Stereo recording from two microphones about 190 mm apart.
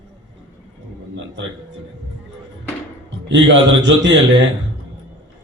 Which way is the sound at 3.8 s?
70° right (ahead or behind).